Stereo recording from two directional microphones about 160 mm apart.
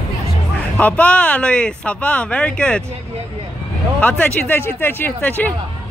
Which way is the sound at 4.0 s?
10° left (ahead or behind).